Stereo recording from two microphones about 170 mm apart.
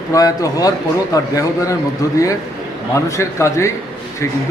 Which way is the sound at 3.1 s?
15° left (ahead or behind).